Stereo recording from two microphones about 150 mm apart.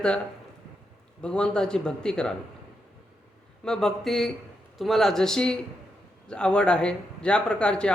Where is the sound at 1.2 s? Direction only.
5° left (ahead or behind).